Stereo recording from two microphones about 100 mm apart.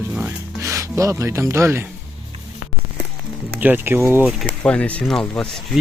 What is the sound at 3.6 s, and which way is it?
Speech, 20° right (ahead or behind).